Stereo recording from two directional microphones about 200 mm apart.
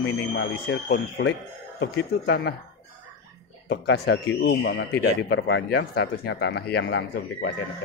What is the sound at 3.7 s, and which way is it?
Speech, 55° left (ahead or behind).